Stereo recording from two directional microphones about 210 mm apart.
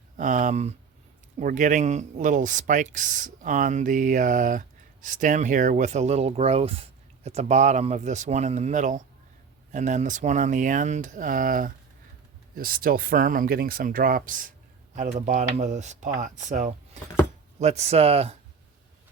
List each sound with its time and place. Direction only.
0.2 s speech: 35° right (ahead or behind)